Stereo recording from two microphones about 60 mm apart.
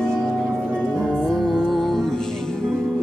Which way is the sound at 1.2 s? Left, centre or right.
Centre.